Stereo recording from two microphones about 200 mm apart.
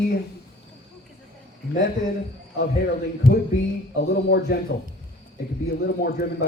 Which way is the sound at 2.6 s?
50° left (ahead or behind).